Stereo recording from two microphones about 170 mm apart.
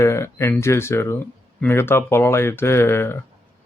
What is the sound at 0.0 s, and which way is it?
Speech, 15° left (ahead or behind).